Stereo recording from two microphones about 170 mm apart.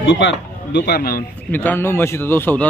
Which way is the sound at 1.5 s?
10° left (ahead or behind).